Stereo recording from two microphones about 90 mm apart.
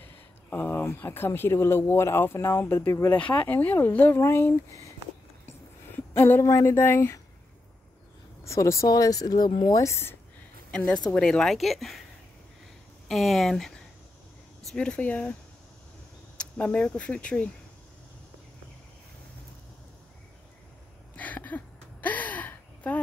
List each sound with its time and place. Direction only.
0.0 s speech: 20° left (ahead or behind)
5.9 s a sound: 25° left (ahead or behind)
6.4 s speech: 35° left (ahead or behind)
8.5 s speech: 35° left (ahead or behind)
10.7 s speech: 10° left (ahead or behind)
13.1 s speech: centre (ahead or behind); by 15.3 s 15° left (ahead or behind)
16.3 s speech: 15° left (ahead or behind)
21.2 s gasp: 20° left (ahead or behind)